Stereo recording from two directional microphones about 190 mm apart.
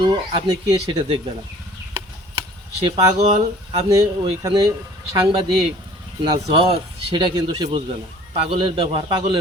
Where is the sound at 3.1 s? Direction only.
35° right (ahead or behind).